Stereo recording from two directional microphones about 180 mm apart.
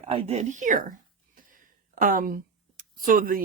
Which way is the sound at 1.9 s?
50° right (ahead or behind).